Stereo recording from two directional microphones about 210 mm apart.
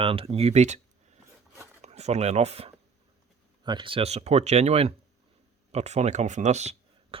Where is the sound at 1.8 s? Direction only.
30° right (ahead or behind).